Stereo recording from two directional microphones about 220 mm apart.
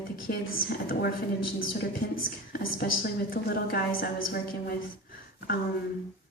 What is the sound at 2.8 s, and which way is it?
A woman's voice, 45° left (ahead or behind).